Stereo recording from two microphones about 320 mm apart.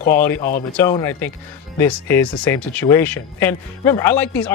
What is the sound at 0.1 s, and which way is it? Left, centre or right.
Speech, centre.